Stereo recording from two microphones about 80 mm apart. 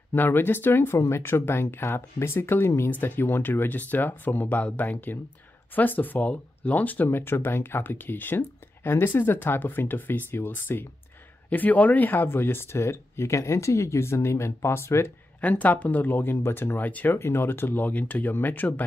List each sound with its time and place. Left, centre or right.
0.1 s speech: left
15.4 s speech: centre